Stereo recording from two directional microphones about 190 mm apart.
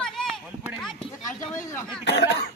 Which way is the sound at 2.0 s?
60° left (ahead or behind).